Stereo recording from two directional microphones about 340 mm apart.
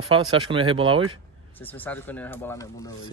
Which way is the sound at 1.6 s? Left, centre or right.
Centre.